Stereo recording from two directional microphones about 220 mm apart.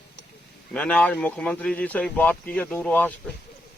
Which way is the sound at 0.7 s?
5° left (ahead or behind).